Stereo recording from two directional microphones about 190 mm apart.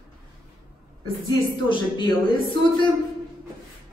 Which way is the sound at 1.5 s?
25° left (ahead or behind).